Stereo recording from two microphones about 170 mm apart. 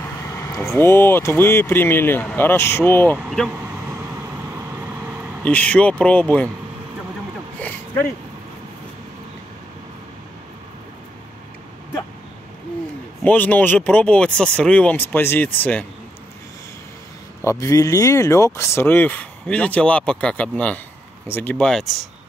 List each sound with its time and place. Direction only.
0.4 s speech: 15° left (ahead or behind)
3.3 s speech: centre (ahead or behind)
5.0 s vehicle: 10° right (ahead or behind)
5.4 s speech: 10° left (ahead or behind)
13.2 s speech: 10° left (ahead or behind)
17.4 s speech: 15° left (ahead or behind); by 22.0 s centre (ahead or behind)